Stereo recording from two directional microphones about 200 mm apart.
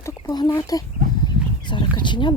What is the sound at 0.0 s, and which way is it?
Speech, 15° left (ahead or behind).